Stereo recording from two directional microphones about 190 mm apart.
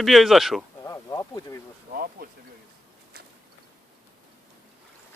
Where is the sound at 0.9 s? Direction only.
15° left (ahead or behind).